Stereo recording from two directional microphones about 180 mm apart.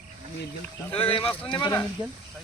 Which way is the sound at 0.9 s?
30° left (ahead or behind).